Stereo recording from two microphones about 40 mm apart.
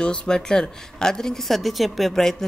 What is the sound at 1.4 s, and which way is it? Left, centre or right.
Speech, centre.